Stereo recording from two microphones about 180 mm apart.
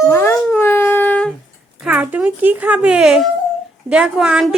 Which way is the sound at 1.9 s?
10° right (ahead or behind).